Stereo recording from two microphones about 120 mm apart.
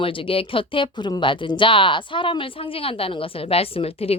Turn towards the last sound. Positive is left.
turn(degrees=55)  # may be behind; listen again after turning